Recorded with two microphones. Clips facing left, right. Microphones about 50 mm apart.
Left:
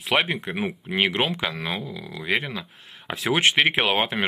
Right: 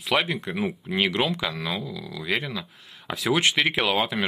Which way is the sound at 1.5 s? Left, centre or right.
Left.